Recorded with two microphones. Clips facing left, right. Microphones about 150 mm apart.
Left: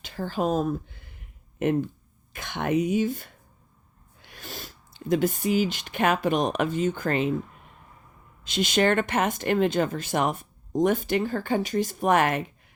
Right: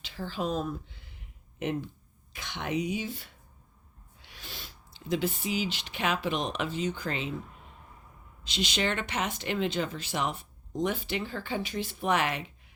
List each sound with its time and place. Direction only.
0.0 s a sound: 50° left (ahead or behind)
2.3 s speech: 50° left (ahead or behind)
8.4 s speech: 50° left (ahead or behind)